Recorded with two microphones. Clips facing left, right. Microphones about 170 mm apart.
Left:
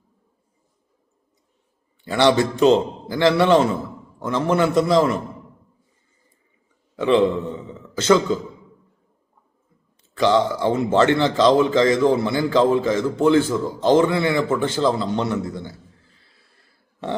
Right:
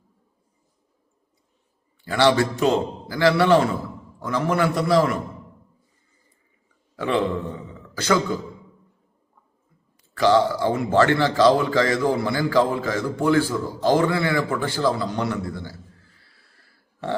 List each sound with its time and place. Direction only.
2.0 s speech: 20° left (ahead or behind)
6.9 s a man's voice: 20° left (ahead or behind)
10.0 s speech: 20° left (ahead or behind)